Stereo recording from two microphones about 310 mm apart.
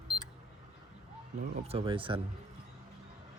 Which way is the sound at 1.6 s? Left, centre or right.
Centre.